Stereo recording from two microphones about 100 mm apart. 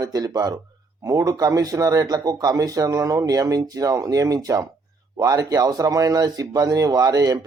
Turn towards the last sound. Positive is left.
turn(degrees=-40)  # may be behind; listen again after turning